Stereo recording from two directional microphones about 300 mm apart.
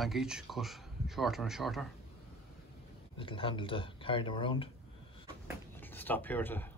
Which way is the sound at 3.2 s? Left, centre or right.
Centre.